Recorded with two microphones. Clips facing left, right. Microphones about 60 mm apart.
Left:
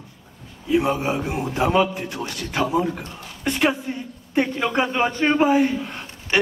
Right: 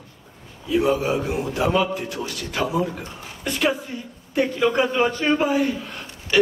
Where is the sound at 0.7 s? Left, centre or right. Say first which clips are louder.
Even; left.